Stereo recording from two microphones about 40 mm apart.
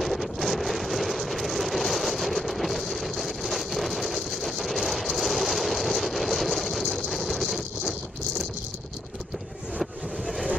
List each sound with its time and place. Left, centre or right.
0.0 s vehicle: centre
9.8 s boat: centre